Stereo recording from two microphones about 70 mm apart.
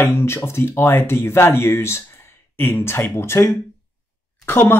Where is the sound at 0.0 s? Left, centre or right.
Left.